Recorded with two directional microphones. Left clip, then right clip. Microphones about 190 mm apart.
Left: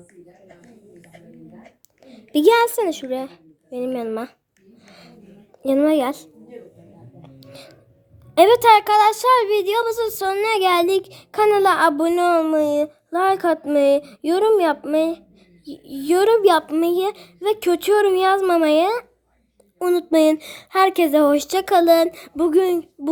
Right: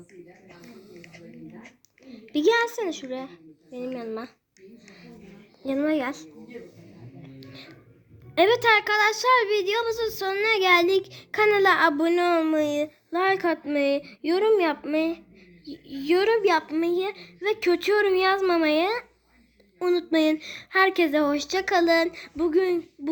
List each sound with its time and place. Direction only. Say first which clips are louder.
1.6 s speech: left 1 dB; 55° left (ahead or behind)
5.6 s a woman's voice: left 8 dB; 55° left (ahead or behind)
7.2 s music: left 3 dB; 55° left (ahead or behind)
8.4 s a woman's voice: left 8 dB; 50° left (ahead or behind)